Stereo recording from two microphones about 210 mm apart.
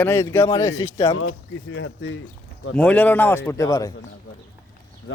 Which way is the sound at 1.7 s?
65° left (ahead or behind).